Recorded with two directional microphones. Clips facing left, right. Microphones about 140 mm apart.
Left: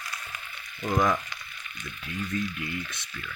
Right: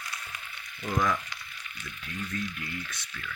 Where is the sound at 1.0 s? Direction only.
25° left (ahead or behind).